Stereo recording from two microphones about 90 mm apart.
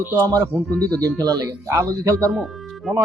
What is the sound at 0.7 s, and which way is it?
Speech, 15° left (ahead or behind).